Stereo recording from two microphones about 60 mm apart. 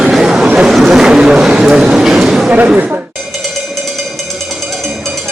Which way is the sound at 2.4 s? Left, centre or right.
Right.